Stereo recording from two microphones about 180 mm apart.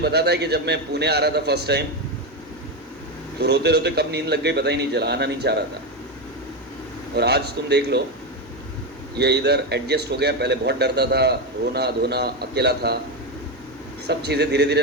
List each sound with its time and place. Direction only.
0.0 s a man's voice: 65° right (ahead or behind)
3.4 s a man's voice: 65° right (ahead or behind)
7.2 s a man's voice: 65° right (ahead or behind)
9.1 s a man's voice: 70° right (ahead or behind)
14.1 s a man's voice: 70° right (ahead or behind)